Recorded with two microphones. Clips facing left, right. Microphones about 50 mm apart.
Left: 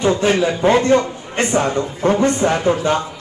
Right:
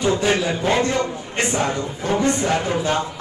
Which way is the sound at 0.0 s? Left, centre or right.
Left.